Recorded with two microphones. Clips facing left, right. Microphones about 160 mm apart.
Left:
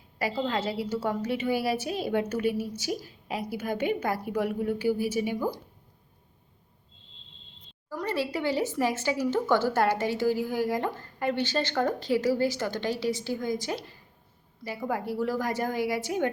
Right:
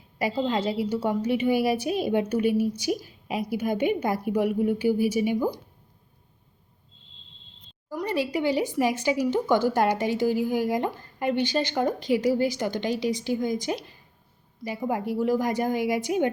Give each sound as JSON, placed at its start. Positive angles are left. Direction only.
{"t": 0.2, "sound": "speech", "side_deg": -20}
{"t": 7.9, "sound": "a woman's voice", "side_deg": -15}